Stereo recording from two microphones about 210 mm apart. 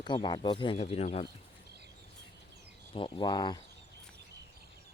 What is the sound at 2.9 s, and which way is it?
Speech, 25° left (ahead or behind).